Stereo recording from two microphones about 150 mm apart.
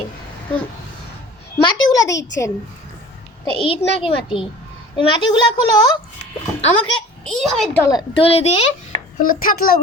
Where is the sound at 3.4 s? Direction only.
35° left (ahead or behind).